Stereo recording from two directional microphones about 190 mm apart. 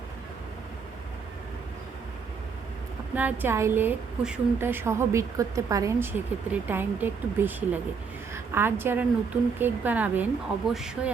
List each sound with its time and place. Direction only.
3.2 s a woman's voice: 10° right (ahead or behind)